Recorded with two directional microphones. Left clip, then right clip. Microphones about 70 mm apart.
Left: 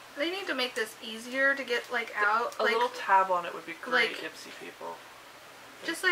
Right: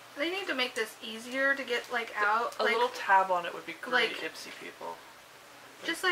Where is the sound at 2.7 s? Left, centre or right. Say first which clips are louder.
Even; centre.